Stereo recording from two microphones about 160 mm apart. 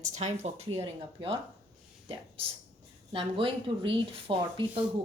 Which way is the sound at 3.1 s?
35° right (ahead or behind).